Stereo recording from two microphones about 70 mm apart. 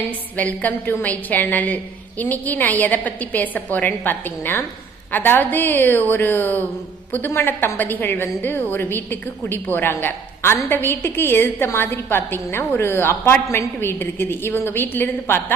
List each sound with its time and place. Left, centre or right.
0.3 s a woman's voice: left